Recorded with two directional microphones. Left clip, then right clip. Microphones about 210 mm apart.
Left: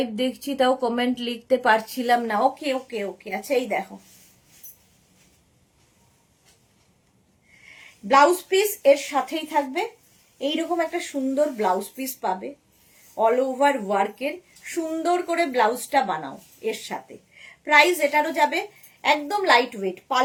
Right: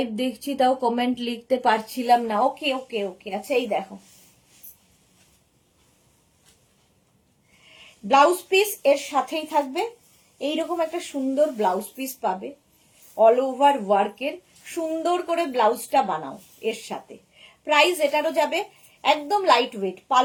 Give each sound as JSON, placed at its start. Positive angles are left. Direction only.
{"t": 0.0, "sound": "speech", "side_deg": 15}
{"t": 8.0, "sound": "speech", "side_deg": 20}
{"t": 17.7, "sound": "speech", "side_deg": 15}